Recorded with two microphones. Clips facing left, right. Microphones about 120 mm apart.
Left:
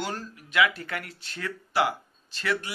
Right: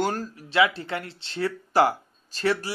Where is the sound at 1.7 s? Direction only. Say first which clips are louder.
Right 4 dB; 40° right (ahead or behind).